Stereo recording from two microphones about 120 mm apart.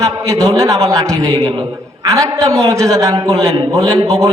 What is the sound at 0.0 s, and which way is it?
A man's voice, 30° right (ahead or behind).